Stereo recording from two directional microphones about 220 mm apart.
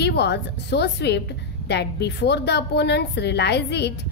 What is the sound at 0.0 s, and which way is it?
A woman's voice, 50° left (ahead or behind).